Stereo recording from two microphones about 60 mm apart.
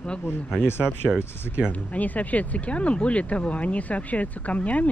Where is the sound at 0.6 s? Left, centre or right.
Left.